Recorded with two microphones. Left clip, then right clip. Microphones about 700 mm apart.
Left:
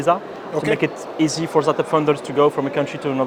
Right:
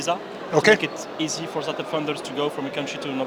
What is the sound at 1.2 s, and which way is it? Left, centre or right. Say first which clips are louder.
A man's voice: left 10 dB; left.